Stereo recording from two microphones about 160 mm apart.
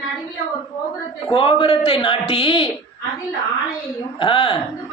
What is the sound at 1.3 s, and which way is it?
A woman's voice, 30° left (ahead or behind).